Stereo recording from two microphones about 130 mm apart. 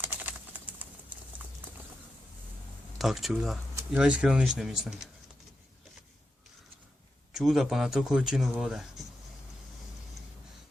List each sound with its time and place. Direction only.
0.0 s typing: 15° right (ahead or behind)
3.0 s speech: centre (ahead or behind)
7.3 s speech: centre (ahead or behind)